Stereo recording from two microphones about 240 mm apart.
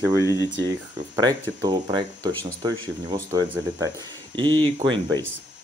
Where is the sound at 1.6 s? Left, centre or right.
Centre.